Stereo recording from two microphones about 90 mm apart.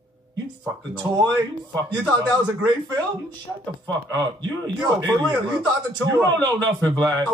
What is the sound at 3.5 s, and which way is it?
Speech, 10° right (ahead or behind).